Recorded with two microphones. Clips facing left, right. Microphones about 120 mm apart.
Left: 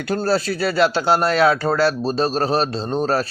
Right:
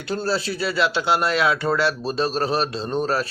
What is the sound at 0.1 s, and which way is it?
A man's voice, 50° left (ahead or behind).